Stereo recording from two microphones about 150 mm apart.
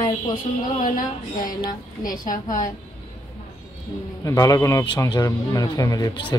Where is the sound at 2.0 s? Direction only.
65° left (ahead or behind).